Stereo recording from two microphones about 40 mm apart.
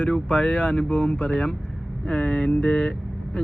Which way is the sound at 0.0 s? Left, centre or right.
Left.